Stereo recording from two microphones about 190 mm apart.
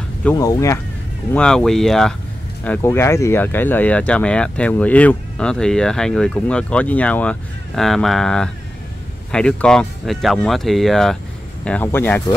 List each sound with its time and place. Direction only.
0.2 s speech: 15° left (ahead or behind)
1.3 s speech: 5° left (ahead or behind)